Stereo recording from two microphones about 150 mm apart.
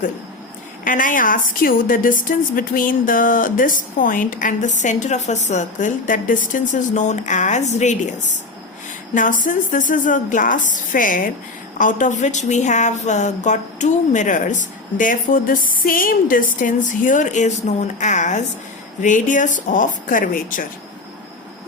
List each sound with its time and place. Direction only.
0.9 s a woman's voice: 65° left (ahead or behind)
9.4 s a woman's voice: 60° left (ahead or behind)